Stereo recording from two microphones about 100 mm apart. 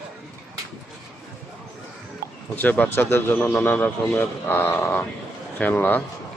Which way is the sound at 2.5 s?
15° left (ahead or behind).